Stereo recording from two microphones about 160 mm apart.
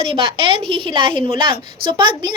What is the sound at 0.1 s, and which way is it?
A woman's voice, 35° right (ahead or behind).